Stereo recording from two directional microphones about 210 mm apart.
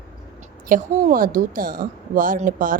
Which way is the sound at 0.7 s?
40° right (ahead or behind).